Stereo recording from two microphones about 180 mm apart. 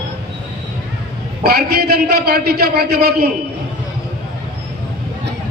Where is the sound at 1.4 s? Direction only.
60° right (ahead or behind).